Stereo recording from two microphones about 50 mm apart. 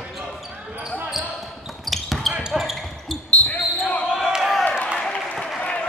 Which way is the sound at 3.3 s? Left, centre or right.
Left.